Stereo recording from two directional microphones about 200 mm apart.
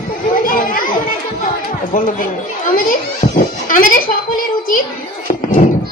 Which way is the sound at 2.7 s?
45° left (ahead or behind).